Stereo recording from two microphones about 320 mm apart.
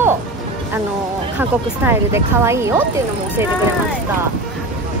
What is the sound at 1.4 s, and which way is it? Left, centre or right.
Speech, centre.